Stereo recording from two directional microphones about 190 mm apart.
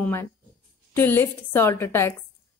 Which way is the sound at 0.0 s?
15° left (ahead or behind).